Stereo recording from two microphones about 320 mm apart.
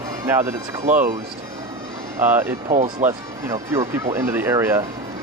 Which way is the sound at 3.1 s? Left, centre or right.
Centre.